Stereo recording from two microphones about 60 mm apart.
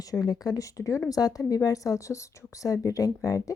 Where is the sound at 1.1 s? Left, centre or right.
Left.